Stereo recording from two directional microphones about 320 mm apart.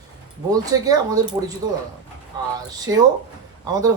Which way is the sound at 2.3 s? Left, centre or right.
Centre.